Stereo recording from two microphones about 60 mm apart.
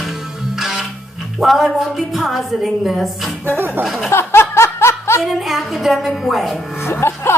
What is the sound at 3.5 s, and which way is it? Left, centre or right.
Speech, right.